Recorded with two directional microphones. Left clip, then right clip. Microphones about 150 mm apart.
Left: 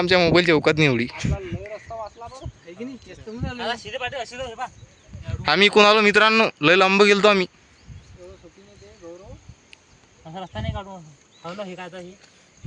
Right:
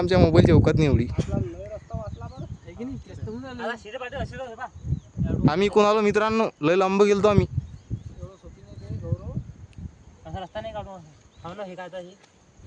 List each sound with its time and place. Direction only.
0.0 s speech: 10° right (ahead or behind)
2.7 s speech: 90° right; by 4.7 s 65° right (ahead or behind)
5.5 s speech: 10° right (ahead or behind)
10.5 s speech: 30° right (ahead or behind)